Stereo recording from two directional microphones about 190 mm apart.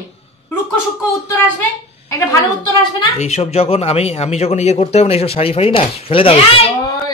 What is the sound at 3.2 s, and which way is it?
Speech, 35° left (ahead or behind).